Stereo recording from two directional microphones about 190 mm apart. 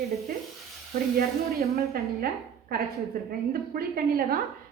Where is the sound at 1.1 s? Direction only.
55° right (ahead or behind).